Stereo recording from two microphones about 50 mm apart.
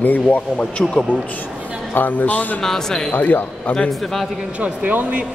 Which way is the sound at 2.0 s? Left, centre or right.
Left.